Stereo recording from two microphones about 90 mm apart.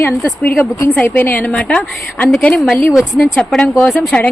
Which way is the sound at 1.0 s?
20° left (ahead or behind).